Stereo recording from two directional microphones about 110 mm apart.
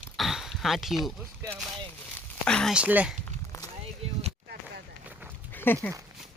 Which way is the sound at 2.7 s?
10° right (ahead or behind).